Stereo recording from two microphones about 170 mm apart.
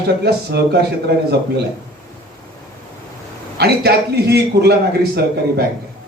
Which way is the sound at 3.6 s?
75° right (ahead or behind).